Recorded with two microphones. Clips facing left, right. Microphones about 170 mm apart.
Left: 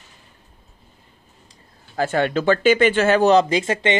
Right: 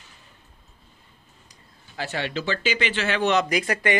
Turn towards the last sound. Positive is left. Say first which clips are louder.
# left 4 dB
turn(degrees=25)  # may be behind; listen again after turning